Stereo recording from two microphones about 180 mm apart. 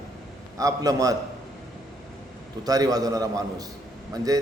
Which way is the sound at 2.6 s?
20° right (ahead or behind).